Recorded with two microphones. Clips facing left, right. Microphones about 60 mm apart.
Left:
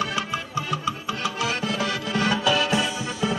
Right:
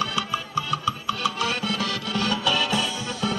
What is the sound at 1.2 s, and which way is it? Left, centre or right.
Music, left.